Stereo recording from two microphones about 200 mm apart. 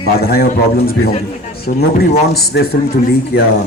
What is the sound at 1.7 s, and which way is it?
Speech, 45° left (ahead or behind).